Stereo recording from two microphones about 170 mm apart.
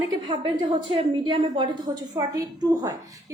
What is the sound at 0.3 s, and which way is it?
A woman's voice, 30° right (ahead or behind).